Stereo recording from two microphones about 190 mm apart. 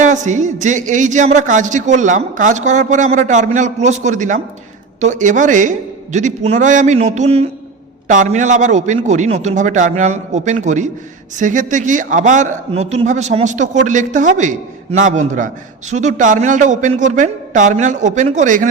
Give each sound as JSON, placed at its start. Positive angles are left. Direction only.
{"t": 0.0, "sound": "a man's voice", "side_deg": -40}